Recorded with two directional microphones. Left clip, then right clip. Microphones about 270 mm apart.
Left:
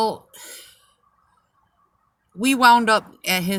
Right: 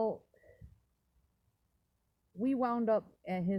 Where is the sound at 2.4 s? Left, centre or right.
Centre.